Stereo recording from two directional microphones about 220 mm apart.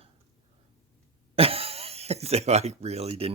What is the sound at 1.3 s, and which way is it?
A man's voice, 25° right (ahead or behind).